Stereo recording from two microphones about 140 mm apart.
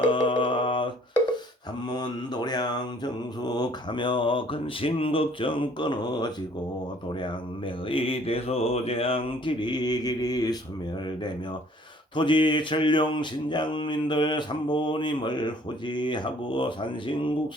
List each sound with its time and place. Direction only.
0.1 s mantra: 35° left (ahead or behind)
1.9 s mantra: 30° left (ahead or behind)
7.9 s mantra: 40° left (ahead or behind)
12.1 s mantra: 35° left (ahead or behind)